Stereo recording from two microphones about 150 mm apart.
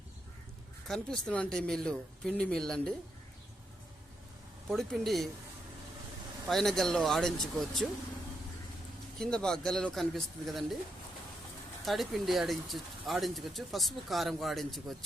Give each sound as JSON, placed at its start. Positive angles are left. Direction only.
{"t": 0.9, "sound": "speech", "side_deg": 5}
{"t": 4.7, "sound": "speech", "side_deg": 0}
{"t": 6.5, "sound": "speech", "side_deg": 0}
{"t": 9.1, "sound": "speech", "side_deg": 5}
{"t": 11.9, "sound": "speech", "side_deg": 0}